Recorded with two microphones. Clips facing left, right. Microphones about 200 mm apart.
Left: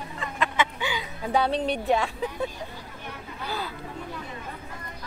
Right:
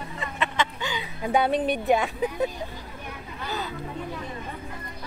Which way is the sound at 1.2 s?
15° right (ahead or behind).